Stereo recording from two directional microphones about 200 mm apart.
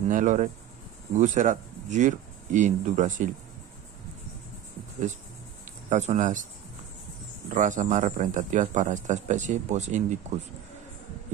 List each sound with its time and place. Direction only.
0.1 s speech: 40° right (ahead or behind)
5.9 s speech: 35° right (ahead or behind)
7.5 s speech: 35° right (ahead or behind)